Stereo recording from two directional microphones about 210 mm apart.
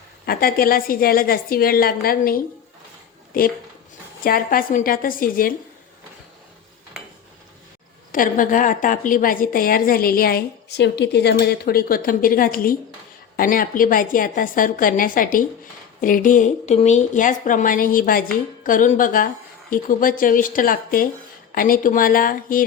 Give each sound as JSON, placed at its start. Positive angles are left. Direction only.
{"t": 0.3, "sound": "a woman's voice", "side_deg": 45}
{"t": 8.1, "sound": "a woman's voice", "side_deg": 40}